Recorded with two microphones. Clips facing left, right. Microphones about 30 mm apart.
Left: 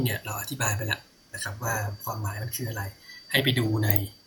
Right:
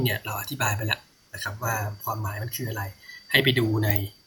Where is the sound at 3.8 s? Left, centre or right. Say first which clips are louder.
Right 2 dB; centre.